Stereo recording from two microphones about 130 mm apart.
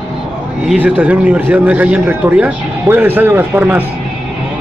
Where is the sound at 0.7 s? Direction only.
10° right (ahead or behind).